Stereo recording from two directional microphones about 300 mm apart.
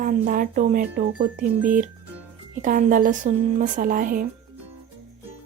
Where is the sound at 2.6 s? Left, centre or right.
Right.